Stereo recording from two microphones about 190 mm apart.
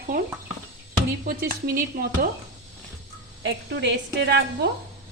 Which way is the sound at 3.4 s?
65° right (ahead or behind).